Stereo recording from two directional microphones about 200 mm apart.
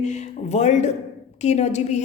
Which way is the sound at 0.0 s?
35° left (ahead or behind).